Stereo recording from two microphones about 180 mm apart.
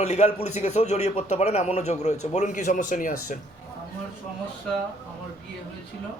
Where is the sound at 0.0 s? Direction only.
40° left (ahead or behind).